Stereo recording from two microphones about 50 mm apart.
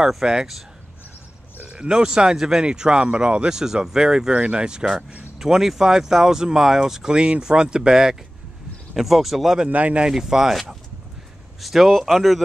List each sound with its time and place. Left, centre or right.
0.0 s speech: centre
1.7 s speech: centre
9.7 s speech: right
10.0 s speech: centre
11.6 s speech: centre